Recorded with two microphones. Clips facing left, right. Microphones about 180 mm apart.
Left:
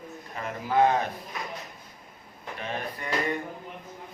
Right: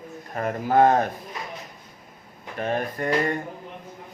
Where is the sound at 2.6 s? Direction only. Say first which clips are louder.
Right 8 dB; 50° right (ahead or behind).